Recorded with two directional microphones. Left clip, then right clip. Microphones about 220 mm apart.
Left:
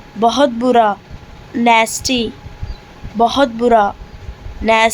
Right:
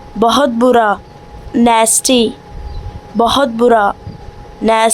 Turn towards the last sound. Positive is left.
turn(degrees=-25)  # may be behind; listen again after turning